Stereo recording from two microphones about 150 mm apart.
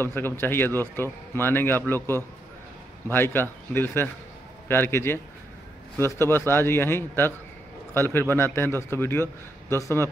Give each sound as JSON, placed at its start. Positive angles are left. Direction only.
{"t": 0.0, "sound": "a man's voice", "side_deg": 15}